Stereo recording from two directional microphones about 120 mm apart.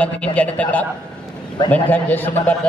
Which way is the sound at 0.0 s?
10° left (ahead or behind).